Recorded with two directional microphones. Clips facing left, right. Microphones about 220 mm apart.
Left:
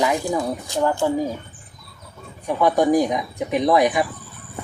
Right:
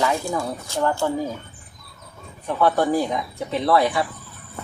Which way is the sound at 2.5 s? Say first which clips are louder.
Left 2 dB; 15° left (ahead or behind).